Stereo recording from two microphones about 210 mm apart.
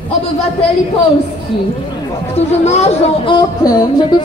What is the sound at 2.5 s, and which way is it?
Speech, 30° left (ahead or behind).